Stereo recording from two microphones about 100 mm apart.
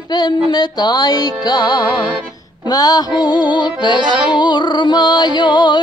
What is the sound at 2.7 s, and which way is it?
Music, 40° left (ahead or behind).